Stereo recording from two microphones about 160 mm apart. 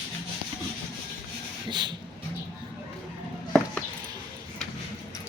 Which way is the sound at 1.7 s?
25° right (ahead or behind).